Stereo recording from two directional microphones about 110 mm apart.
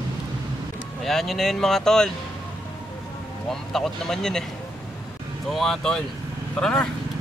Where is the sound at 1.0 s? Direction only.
Centre (ahead or behind).